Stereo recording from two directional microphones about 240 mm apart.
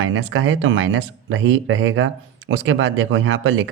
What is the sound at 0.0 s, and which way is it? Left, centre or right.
Speech, right.